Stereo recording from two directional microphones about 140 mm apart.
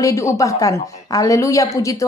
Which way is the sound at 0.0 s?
20° left (ahead or behind).